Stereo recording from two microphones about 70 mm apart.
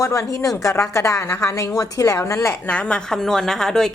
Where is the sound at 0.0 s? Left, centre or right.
Left.